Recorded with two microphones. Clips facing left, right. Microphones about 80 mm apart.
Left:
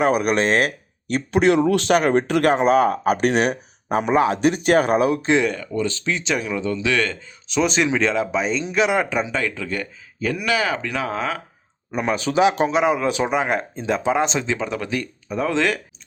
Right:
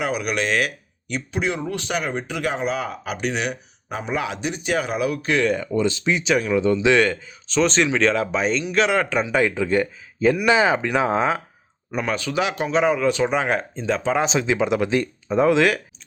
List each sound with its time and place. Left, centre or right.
0.0 s speech: left
4.1 s speech: left
4.4 s speech: left
5.0 s speech: left
5.5 s speech: centre
6.2 s speech: centre
6.6 s speech: centre
7.4 s speech: centre
9.3 s speech: centre
11.9 s speech: centre
12.7 s speech: centre
14.2 s speech: centre
15.5 s speech: centre